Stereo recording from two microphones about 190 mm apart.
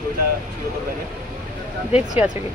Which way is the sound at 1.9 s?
35° left (ahead or behind).